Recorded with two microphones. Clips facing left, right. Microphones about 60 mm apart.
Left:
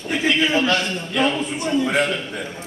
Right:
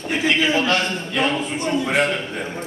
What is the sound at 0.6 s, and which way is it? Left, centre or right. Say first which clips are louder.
A man's voice: even; right.